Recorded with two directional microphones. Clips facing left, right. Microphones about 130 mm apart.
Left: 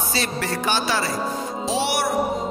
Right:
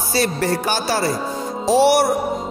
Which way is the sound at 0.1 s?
40° right (ahead or behind).